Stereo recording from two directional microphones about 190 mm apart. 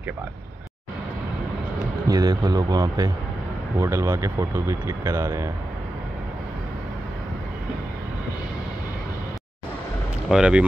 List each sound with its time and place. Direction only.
2.0 s speech: 20° right (ahead or behind)
10.2 s speech: 5° right (ahead or behind)